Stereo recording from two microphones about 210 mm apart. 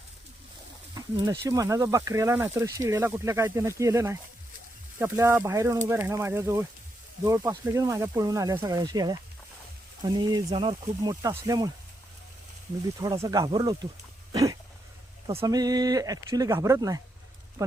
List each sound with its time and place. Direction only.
0.9 s speech: 15° right (ahead or behind)
13.0 s speech: 20° right (ahead or behind)
15.3 s speech: 20° right (ahead or behind)